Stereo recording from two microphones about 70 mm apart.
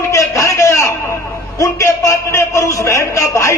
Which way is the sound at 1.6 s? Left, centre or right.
Left.